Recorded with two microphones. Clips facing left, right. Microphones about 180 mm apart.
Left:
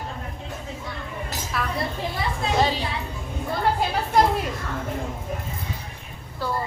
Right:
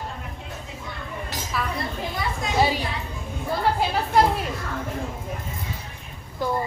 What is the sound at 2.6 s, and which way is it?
Speech, 10° right (ahead or behind).